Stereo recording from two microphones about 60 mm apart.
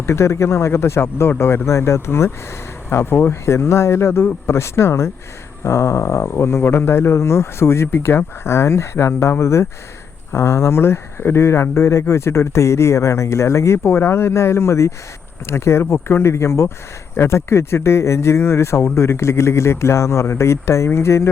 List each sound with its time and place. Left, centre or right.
0.0 s speech: left